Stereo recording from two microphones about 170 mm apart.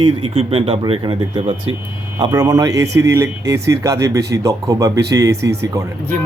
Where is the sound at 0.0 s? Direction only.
30° right (ahead or behind).